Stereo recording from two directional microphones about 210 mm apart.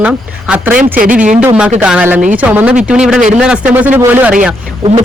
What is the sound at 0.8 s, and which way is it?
Speech, 40° right (ahead or behind).